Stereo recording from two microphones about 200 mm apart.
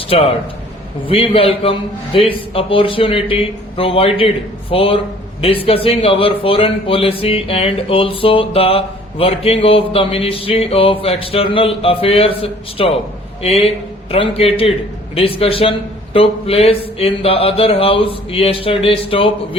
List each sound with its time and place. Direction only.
1.0 s a man's voice: 25° left (ahead or behind)